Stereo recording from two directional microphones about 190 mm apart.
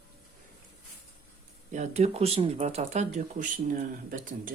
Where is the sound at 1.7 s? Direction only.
35° right (ahead or behind).